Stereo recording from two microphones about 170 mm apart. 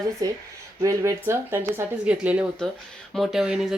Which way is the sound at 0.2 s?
20° right (ahead or behind).